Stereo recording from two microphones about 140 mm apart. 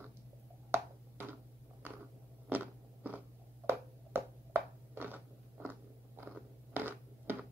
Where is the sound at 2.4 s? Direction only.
10° right (ahead or behind).